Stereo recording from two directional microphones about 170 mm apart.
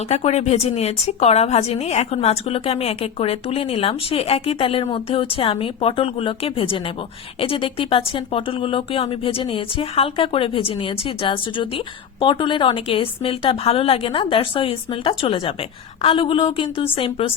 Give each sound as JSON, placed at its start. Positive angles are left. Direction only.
{"t": 0.1, "sound": "a woman's voice", "side_deg": 40}